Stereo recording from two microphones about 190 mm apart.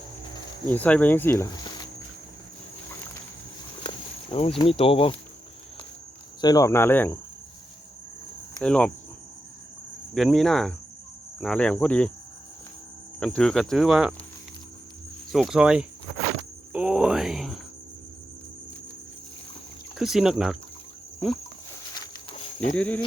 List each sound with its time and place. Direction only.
0.7 s speech: 10° left (ahead or behind)
3.8 s speech: 30° left (ahead or behind)
6.4 s speech: 20° left (ahead or behind)
8.6 s cricket: 5° left (ahead or behind)
10.2 s cricket: centre (ahead or behind)
11.3 s speech: 5° left (ahead or behind)
13.1 s cricket: 5° left (ahead or behind)
15.3 s cricket: centre (ahead or behind)
16.7 s a sound: 5° right (ahead or behind)
20.0 s cricket: centre (ahead or behind)
22.0 s a sound: 25° left (ahead or behind)
22.7 s speech: 5° left (ahead or behind)